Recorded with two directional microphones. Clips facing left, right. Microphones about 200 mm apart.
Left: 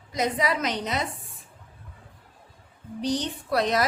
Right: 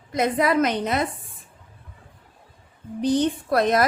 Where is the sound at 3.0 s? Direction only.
55° right (ahead or behind).